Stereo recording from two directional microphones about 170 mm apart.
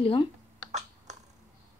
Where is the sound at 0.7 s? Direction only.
40° right (ahead or behind).